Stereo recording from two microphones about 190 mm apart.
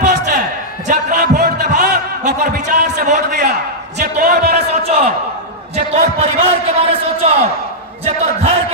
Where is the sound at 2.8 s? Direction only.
40° right (ahead or behind).